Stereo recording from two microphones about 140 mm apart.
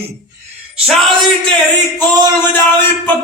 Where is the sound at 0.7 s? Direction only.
5° right (ahead or behind).